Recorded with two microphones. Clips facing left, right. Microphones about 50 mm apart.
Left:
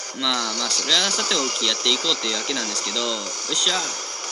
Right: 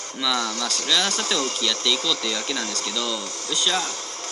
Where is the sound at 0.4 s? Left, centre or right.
Centre.